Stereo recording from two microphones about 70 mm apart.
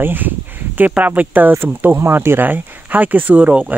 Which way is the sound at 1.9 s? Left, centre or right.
Right.